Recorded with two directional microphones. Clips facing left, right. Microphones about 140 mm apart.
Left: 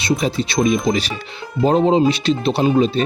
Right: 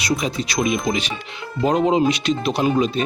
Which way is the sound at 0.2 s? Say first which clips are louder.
Left 4 dB; 30° left (ahead or behind).